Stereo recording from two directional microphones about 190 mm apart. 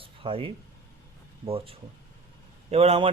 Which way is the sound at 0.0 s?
30° right (ahead or behind).